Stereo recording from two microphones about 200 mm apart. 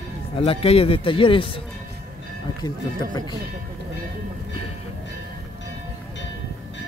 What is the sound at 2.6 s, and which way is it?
Speech, 20° left (ahead or behind).